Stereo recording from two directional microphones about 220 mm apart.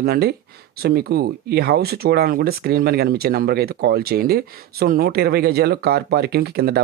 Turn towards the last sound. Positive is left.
turn(degrees=-45)  # may be behind; listen again after turning